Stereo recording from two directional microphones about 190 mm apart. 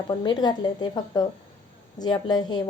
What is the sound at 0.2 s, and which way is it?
A woman's voice, 20° left (ahead or behind).